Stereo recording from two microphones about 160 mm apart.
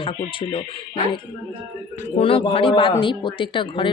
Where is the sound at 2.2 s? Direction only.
35° left (ahead or behind).